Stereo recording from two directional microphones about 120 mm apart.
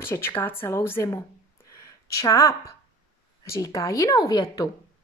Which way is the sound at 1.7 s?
25° left (ahead or behind).